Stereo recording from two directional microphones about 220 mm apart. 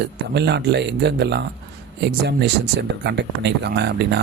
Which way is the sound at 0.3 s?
50° right (ahead or behind).